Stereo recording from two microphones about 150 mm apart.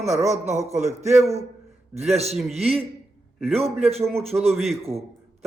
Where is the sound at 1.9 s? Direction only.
45° right (ahead or behind).